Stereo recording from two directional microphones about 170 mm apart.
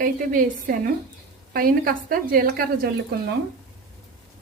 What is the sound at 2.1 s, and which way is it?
Speech, 60° right (ahead or behind).